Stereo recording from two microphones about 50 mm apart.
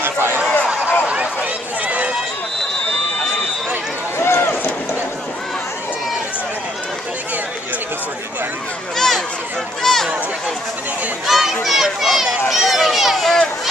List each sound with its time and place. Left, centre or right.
0.0 s run: right
0.4 s run: centre
4.2 s run: left
8.9 s a sound: centre
11.2 s a sound: centre
11.6 s run: centre